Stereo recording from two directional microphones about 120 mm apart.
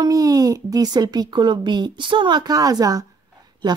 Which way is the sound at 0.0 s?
30° right (ahead or behind).